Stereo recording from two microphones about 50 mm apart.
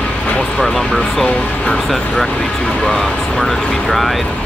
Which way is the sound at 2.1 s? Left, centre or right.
Centre.